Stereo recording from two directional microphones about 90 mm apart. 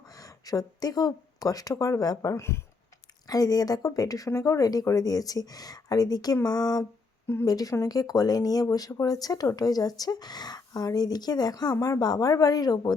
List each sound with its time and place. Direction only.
0.0 s speech: 40° left (ahead or behind)